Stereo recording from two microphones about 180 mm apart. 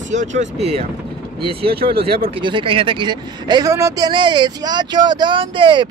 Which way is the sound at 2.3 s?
25° right (ahead or behind).